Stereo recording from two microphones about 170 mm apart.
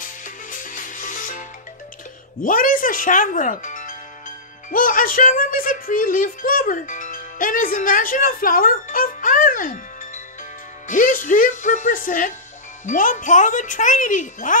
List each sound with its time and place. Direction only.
0.0 s music: 50° left (ahead or behind)
2.4 s speech: 55° left (ahead or behind)